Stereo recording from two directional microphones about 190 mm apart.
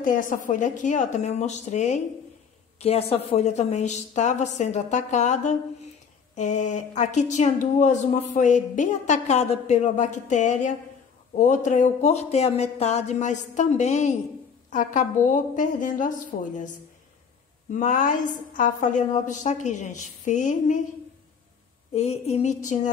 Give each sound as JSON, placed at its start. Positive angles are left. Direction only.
{"t": 0.0, "sound": "a woman's voice", "side_deg": 45}
{"t": 17.6, "sound": "a woman's voice", "side_deg": 45}
{"t": 21.9, "sound": "speech", "side_deg": 35}